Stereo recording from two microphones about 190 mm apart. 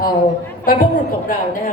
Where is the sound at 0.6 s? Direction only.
50° left (ahead or behind).